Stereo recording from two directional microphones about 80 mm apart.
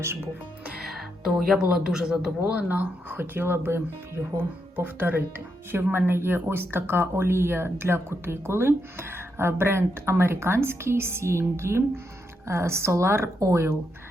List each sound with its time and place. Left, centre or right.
0.8 s speech: centre; by 13.7 s right